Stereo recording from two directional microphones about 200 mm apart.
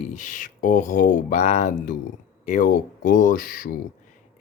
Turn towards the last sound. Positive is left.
turn(degrees=45)  # may be behind; listen again after turning